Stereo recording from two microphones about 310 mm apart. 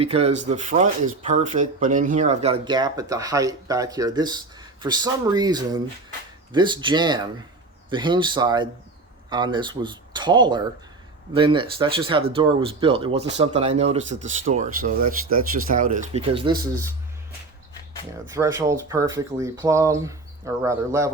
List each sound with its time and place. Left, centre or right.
0.0 s speech: centre
15.0 s speech: right
15.6 s speech: right
18.3 s speech: centre